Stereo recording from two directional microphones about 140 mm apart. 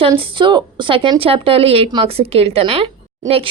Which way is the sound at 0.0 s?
35° right (ahead or behind).